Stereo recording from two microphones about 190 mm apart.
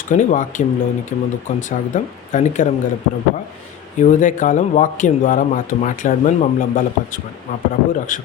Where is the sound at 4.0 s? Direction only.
45° left (ahead or behind).